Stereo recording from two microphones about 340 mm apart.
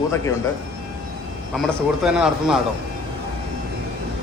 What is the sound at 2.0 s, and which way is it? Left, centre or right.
Speech, centre.